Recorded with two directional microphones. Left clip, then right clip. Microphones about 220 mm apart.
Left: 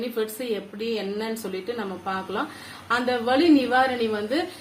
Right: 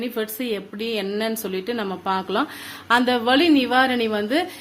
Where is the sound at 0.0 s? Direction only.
40° right (ahead or behind).